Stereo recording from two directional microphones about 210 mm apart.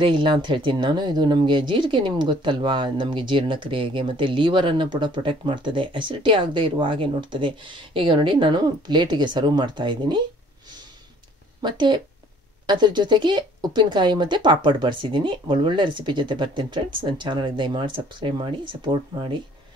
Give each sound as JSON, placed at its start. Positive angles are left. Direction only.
{"t": 0.0, "sound": "speech", "side_deg": -25}
{"t": 11.6, "sound": "speech", "side_deg": -20}